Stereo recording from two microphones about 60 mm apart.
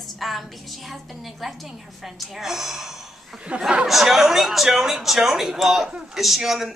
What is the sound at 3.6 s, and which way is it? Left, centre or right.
Speech, centre.